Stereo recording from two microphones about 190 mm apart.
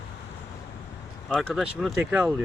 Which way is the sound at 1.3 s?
Centre (ahead or behind).